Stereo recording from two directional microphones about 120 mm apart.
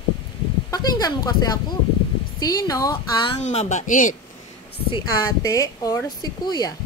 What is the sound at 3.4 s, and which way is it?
Speech, 65° left (ahead or behind).